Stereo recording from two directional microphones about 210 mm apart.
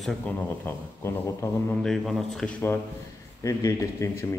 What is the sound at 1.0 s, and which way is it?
Speech, 10° left (ahead or behind).